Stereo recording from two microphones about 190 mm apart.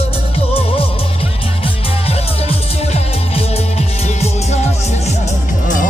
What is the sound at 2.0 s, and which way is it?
Music, 30° left (ahead or behind).